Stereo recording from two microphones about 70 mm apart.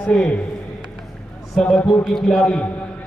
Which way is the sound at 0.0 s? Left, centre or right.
Centre.